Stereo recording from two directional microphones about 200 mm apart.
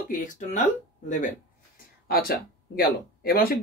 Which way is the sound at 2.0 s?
50° left (ahead or behind).